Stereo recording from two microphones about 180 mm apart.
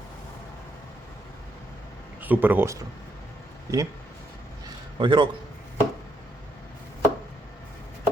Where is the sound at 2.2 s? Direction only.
10° right (ahead or behind).